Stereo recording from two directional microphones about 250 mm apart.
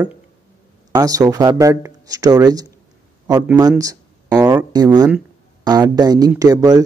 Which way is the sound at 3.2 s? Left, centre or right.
Centre.